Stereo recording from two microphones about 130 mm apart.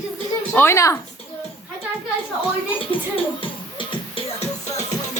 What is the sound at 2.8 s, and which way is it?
Speech, 45° left (ahead or behind).